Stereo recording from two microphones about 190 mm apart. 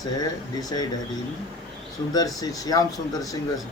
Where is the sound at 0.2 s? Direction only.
20° left (ahead or behind).